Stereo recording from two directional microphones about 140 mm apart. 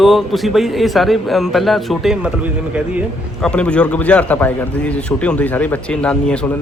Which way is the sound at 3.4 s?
5° left (ahead or behind).